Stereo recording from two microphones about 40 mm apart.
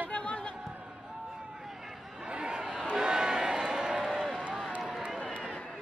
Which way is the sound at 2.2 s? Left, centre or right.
Right.